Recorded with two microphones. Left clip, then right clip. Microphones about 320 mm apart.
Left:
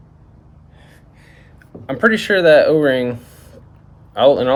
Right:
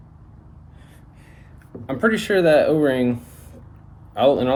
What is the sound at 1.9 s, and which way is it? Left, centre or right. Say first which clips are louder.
Speech: left 5 dB; left.